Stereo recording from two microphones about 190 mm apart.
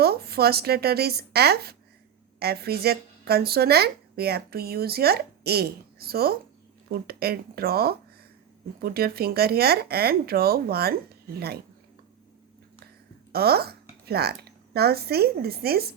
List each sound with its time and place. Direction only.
0.0 s a woman's voice: 55° right (ahead or behind)
13.3 s a woman's voice: 55° right (ahead or behind)